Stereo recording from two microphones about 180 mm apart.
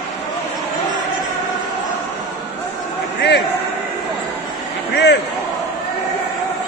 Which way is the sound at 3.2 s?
70° left (ahead or behind).